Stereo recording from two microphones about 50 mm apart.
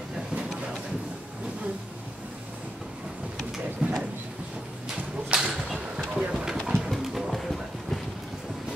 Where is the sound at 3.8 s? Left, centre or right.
Right.